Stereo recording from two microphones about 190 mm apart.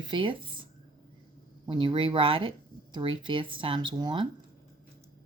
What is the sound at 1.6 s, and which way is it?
Speech, 25° right (ahead or behind).